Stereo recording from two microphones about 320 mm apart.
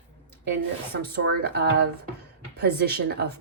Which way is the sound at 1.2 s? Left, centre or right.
Right.